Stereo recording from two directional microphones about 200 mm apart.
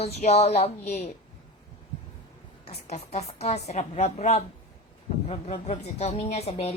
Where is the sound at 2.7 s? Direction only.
35° left (ahead or behind).